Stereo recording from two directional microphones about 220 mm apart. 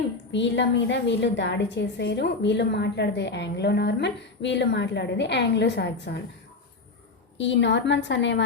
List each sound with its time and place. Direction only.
0.3 s a woman's voice: 55° left (ahead or behind)
7.3 s a woman's voice: 55° left (ahead or behind)